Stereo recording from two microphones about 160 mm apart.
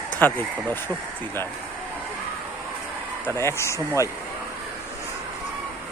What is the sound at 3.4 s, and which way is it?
Speech, 15° left (ahead or behind).